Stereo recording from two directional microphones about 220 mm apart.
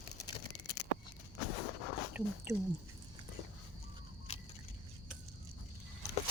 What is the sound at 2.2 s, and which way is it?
Speech, 5° right (ahead or behind).